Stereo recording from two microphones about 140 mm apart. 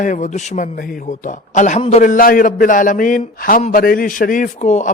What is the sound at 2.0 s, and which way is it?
A man's voice, 80° left.